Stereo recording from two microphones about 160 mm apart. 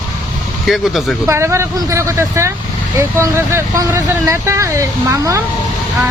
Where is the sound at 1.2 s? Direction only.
15° right (ahead or behind).